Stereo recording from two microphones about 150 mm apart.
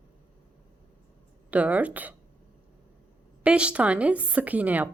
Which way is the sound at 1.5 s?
10° right (ahead or behind).